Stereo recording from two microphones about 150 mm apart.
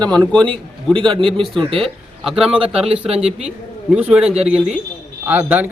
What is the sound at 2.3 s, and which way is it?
Speech, 5° right (ahead or behind).